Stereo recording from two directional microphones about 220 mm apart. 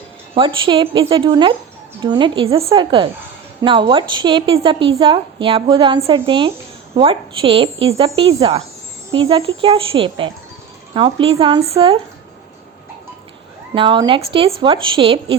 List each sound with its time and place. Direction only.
0.3 s a woman's voice: 20° right (ahead or behind)
13.7 s a woman's voice: 20° right (ahead or behind)